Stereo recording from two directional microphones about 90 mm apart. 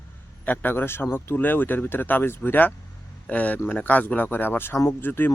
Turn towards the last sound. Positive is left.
turn(degrees=25)  # may be behind; listen again after turning